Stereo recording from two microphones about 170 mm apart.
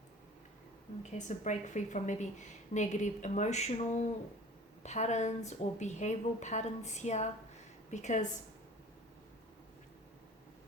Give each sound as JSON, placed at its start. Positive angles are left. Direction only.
{"t": 1.0, "sound": "a woman's voice", "side_deg": 45}